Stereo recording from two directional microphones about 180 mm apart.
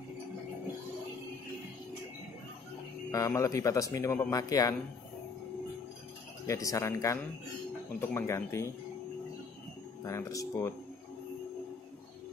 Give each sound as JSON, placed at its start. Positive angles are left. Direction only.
{"t": 3.1, "sound": "speech", "side_deg": 20}
{"t": 6.4, "sound": "speech", "side_deg": 15}
{"t": 10.0, "sound": "speech", "side_deg": 15}